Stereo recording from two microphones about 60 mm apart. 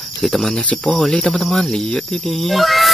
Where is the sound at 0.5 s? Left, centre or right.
Centre.